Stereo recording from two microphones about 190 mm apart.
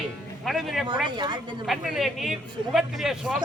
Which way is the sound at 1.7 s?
Centre (ahead or behind).